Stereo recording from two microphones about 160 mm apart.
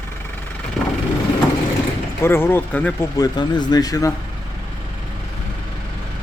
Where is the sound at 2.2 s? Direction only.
15° left (ahead or behind).